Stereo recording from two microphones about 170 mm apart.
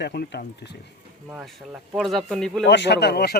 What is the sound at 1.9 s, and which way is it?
Speech, centre (ahead or behind).